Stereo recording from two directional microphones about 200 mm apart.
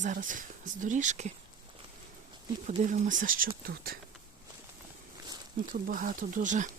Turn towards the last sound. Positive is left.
turn(degrees=-40)  # may be behind; listen again after turning